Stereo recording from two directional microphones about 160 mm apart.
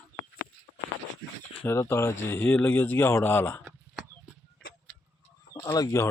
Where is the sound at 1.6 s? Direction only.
15° left (ahead or behind).